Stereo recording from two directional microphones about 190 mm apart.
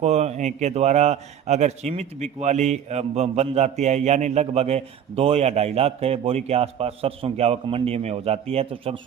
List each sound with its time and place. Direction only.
0.0 s a man's voice: 35° right (ahead or behind)